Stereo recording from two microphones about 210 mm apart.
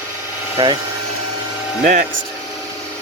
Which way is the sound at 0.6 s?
25° right (ahead or behind).